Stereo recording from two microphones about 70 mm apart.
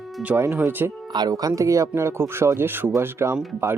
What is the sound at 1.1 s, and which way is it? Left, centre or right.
Speech, right.